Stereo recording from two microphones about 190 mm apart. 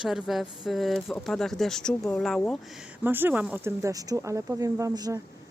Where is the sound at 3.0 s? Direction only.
10° right (ahead or behind).